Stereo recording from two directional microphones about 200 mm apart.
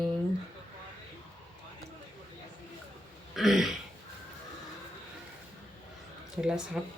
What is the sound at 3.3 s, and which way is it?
Speech, centre (ahead or behind).